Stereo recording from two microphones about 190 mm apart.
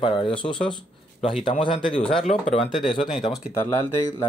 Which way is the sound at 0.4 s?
25° left (ahead or behind).